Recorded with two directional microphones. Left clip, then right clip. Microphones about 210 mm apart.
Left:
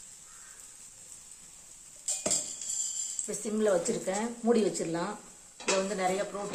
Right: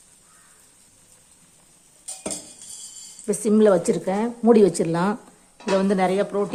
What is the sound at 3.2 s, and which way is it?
Speech, 45° right (ahead or behind).